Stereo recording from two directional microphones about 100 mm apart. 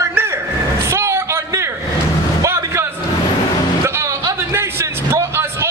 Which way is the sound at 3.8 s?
25° right (ahead or behind).